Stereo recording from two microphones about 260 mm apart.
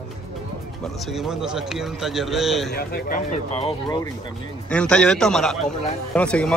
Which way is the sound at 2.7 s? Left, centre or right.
Left.